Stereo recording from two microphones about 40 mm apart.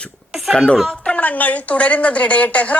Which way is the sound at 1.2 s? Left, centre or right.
Left.